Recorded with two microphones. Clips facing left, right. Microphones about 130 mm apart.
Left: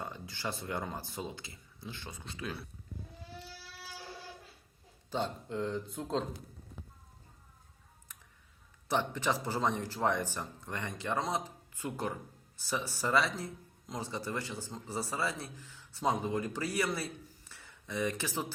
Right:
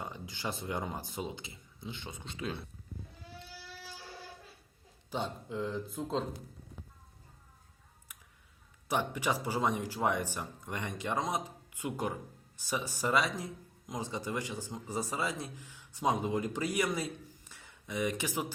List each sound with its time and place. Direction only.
0.0 s speech: 15° right (ahead or behind)
5.1 s speech: 5° right (ahead or behind)
8.9 s speech: 10° right (ahead or behind)